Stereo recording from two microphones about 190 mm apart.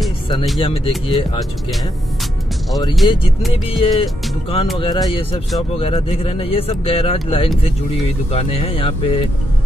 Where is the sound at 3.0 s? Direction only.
25° left (ahead or behind).